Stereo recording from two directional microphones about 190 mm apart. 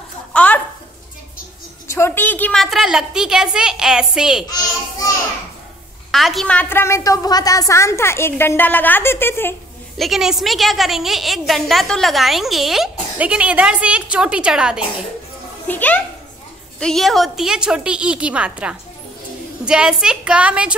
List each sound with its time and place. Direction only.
0.3 s a sound: 5° left (ahead or behind)
1.9 s a woman's voice: 15° left (ahead or behind); by 4.5 s 5° right (ahead or behind)
4.5 s a child's voice: 20° left (ahead or behind)
6.1 s a woman's voice: centre (ahead or behind)
9.9 s a woman's voice: centre (ahead or behind)
15.6 s a child's voice: 10° left (ahead or behind)